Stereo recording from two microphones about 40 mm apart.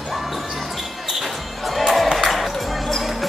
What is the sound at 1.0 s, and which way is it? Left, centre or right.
Basketball bounce, centre.